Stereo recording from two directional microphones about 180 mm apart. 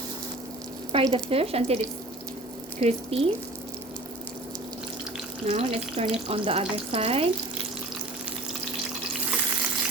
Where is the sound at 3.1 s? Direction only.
35° right (ahead or behind).